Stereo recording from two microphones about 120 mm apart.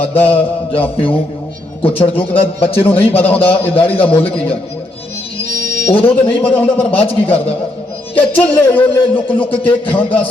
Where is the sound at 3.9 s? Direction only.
50° left (ahead or behind).